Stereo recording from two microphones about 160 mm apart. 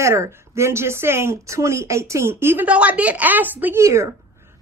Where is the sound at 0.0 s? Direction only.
20° right (ahead or behind).